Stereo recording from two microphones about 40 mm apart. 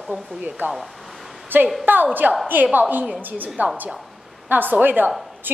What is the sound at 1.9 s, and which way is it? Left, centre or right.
A woman's voice, right.